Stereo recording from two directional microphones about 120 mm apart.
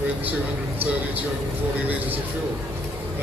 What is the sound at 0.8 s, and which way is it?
Speech, 15° right (ahead or behind).